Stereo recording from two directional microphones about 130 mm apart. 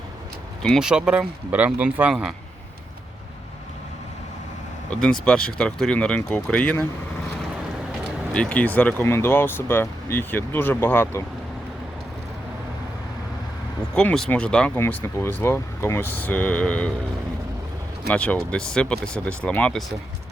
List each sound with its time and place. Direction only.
0.6 s speech: centre (ahead or behind)
4.9 s speech: 5° left (ahead or behind)
8.3 s speech: 10° left (ahead or behind)
13.9 s speech: 5° left (ahead or behind)
14.8 s speech: 20° left (ahead or behind)
18.1 s speech: 10° left (ahead or behind)